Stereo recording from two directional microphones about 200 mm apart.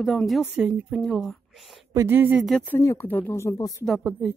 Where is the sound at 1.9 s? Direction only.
15° right (ahead or behind); by 3.8 s 15° left (ahead or behind).